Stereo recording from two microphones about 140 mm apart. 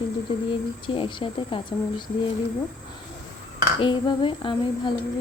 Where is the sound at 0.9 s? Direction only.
35° left (ahead or behind).